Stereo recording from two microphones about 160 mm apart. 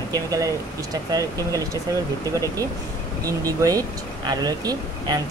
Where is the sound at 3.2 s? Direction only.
20° right (ahead or behind).